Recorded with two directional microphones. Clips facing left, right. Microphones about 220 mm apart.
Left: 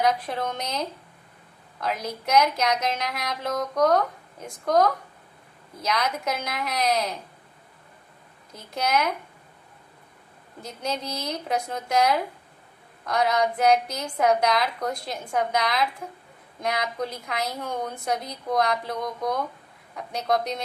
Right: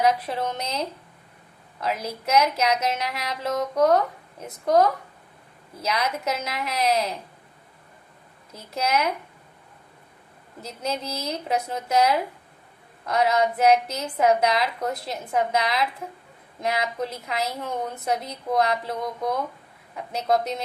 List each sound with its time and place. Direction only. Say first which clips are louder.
0.0 s a woman's voice: right 2 dB; 5° right (ahead or behind)
1.8 s a woman's voice: right 1 dB; 5° right (ahead or behind)
8.7 s speech: right 1 dB; 5° right (ahead or behind)
11.0 s a woman's voice: right 1 dB; 30° right (ahead or behind)
11.4 s a woman's voice: right 2 dB; 5° right (ahead or behind)